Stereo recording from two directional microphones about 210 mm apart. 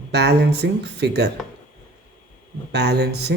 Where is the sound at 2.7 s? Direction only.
50° right (ahead or behind).